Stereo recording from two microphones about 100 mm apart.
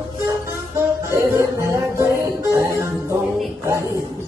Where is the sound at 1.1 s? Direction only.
30° right (ahead or behind).